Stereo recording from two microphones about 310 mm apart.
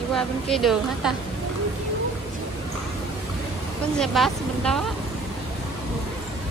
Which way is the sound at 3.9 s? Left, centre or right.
Centre.